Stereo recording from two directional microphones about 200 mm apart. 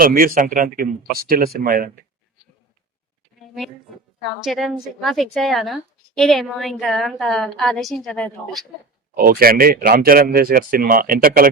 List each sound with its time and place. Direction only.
0.0 s speech: 45° right (ahead or behind)
3.4 s a sound: centre (ahead or behind)
4.4 s a woman's voice: centre (ahead or behind)
9.1 s speech: 50° right (ahead or behind)